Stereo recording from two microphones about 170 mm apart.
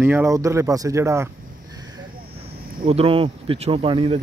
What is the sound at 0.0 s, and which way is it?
Speech, 15° right (ahead or behind).